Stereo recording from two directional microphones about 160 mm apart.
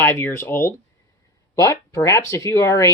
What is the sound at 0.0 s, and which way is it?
Speech, 15° left (ahead or behind).